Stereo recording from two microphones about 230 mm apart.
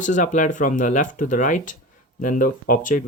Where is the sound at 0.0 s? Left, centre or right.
Left.